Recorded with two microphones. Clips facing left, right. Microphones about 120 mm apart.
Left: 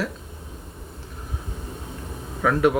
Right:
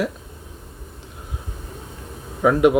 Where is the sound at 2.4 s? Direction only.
15° right (ahead or behind).